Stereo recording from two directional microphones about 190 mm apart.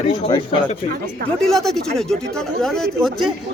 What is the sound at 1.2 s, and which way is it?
A man's voice, centre (ahead or behind).